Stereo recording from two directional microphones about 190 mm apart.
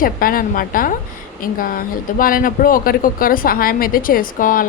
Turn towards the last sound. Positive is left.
turn(degrees=45)  # may be behind; listen again after turning